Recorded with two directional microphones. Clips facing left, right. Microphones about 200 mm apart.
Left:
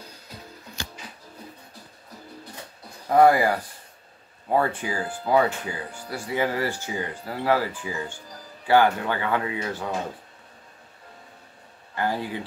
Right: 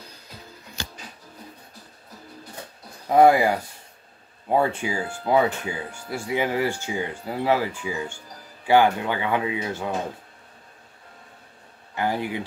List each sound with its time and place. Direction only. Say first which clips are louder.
3.1 s speech: right 1 dB; 20° right (ahead or behind)
11.9 s speech: right 1 dB; 20° right (ahead or behind)